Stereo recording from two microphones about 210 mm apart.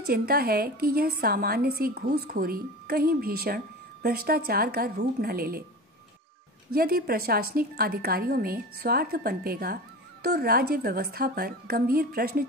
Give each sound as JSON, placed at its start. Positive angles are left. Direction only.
{"t": 0.0, "sound": "a woman's voice", "side_deg": -45}
{"t": 6.7, "sound": "a woman's voice", "side_deg": -45}